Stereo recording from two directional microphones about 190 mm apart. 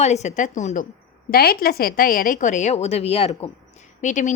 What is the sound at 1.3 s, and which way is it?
A woman's voice, 55° left (ahead or behind).